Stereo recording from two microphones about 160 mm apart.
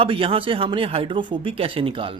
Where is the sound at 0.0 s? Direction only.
35° right (ahead or behind).